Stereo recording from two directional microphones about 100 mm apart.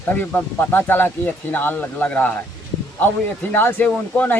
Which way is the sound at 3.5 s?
20° left (ahead or behind).